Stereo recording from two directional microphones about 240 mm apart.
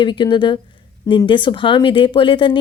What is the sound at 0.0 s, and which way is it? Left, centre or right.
Speech, centre.